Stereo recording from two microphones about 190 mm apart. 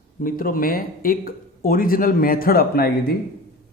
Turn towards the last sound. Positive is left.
turn(degrees=55)  # may be behind; listen again after turning